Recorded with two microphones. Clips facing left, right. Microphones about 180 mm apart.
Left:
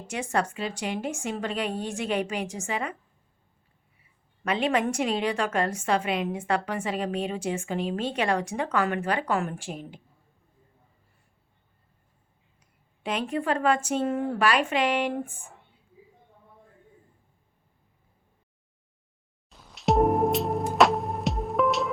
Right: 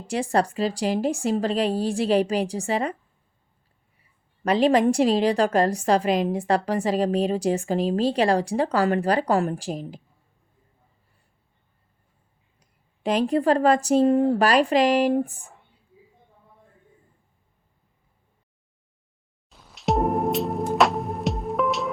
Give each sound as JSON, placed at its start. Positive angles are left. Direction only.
{"t": 0.1, "sound": "a woman's voice", "side_deg": -35}
{"t": 4.4, "sound": "a woman's voice", "side_deg": -35}
{"t": 12.5, "sound": "a woman's voice", "side_deg": -35}
{"t": 19.5, "sound": "music", "side_deg": 0}